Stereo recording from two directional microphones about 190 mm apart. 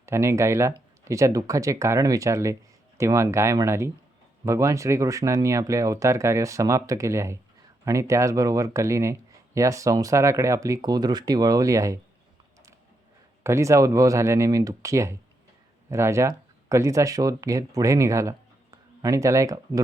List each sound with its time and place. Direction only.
0.0 s speech: 15° right (ahead or behind)
13.4 s speech: 15° right (ahead or behind)